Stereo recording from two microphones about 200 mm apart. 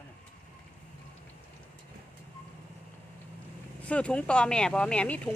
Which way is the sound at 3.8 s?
5° left (ahead or behind).